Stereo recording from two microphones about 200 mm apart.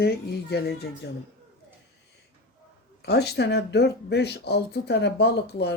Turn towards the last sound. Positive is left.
turn(degrees=55)  # may be behind; listen again after turning